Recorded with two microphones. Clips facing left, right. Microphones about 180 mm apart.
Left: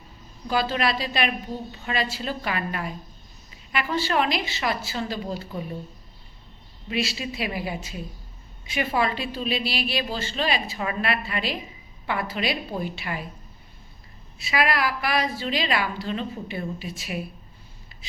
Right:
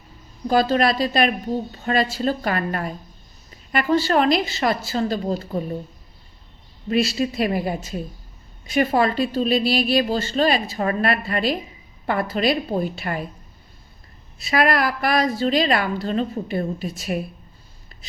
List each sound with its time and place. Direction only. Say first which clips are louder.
0.4 s a woman's voice: right 6 dB; 40° right (ahead or behind)
6.8 s a woman's voice: right 8 dB; 45° right (ahead or behind)
14.4 s a woman's voice: right 5 dB; 45° right (ahead or behind)